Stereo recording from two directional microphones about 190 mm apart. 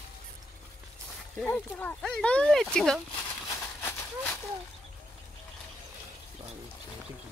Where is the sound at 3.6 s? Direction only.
5° left (ahead or behind).